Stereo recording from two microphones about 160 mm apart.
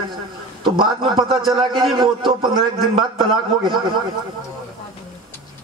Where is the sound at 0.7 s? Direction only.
30° right (ahead or behind).